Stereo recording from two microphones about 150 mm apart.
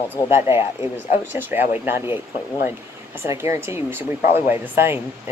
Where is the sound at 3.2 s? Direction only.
20° right (ahead or behind).